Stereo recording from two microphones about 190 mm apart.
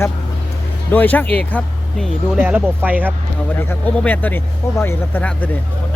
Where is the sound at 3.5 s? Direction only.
10° left (ahead or behind).